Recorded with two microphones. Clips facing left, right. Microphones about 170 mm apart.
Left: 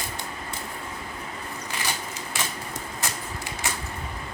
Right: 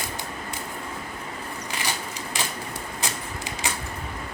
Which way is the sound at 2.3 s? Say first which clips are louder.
Even; 15° right (ahead or behind).